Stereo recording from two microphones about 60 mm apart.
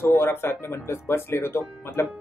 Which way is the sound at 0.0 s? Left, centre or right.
Left.